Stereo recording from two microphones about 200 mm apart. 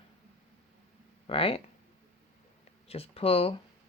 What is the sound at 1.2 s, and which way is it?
Speech, 25° left (ahead or behind).